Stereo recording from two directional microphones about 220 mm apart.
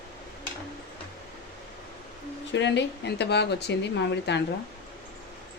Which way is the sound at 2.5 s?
55° left (ahead or behind).